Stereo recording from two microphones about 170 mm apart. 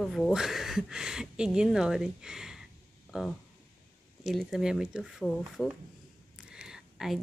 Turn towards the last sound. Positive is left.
turn(degrees=0)  # may be behind; listen again after turning